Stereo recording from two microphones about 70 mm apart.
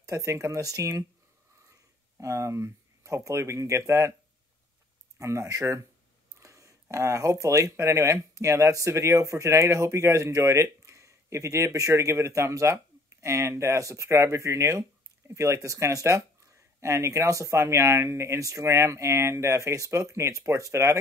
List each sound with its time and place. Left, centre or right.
0.0 s speech: right
2.1 s speech: right
5.2 s speech: right